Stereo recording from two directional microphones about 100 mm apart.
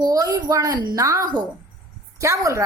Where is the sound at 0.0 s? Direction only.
35° right (ahead or behind).